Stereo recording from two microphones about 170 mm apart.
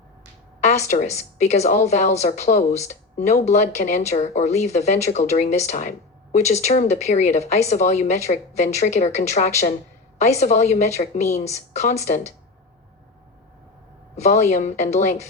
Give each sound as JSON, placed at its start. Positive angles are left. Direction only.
{"t": 0.9, "sound": "a woman's voice", "side_deg": 40}
{"t": 14.2, "sound": "a woman's voice", "side_deg": 40}